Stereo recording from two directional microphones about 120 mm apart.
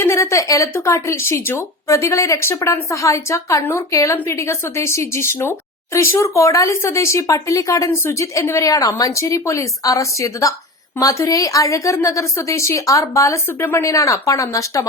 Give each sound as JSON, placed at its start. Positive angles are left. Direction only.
{"t": 0.0, "sound": "speech", "side_deg": 25}